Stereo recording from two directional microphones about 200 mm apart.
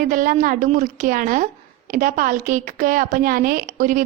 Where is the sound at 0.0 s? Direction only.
40° right (ahead or behind).